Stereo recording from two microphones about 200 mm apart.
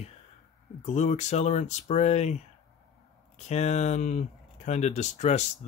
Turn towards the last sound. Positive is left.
turn(degrees=35)  # may be behind; listen again after turning